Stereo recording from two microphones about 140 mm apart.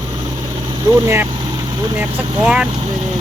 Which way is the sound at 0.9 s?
20° right (ahead or behind).